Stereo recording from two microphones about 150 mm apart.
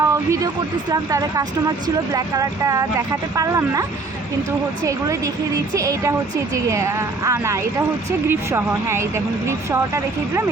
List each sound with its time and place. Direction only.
0.0 s speech: 20° right (ahead or behind)
4.9 s speech: 20° right (ahead or behind)